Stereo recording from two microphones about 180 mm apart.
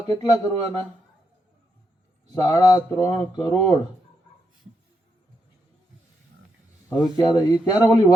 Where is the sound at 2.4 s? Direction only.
20° left (ahead or behind).